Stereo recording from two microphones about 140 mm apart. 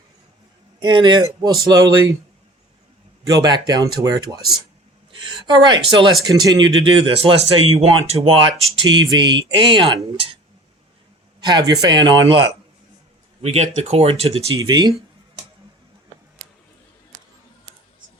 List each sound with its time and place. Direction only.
0.8 s speech: 35° right (ahead or behind)
3.2 s speech: 30° right (ahead or behind); by 8.4 s 45° right (ahead or behind)
8.8 s speech: 35° right (ahead or behind)
11.3 s speech: 30° right (ahead or behind)
13.4 s speech: 50° right (ahead or behind)
14.5 s speech: 30° right (ahead or behind)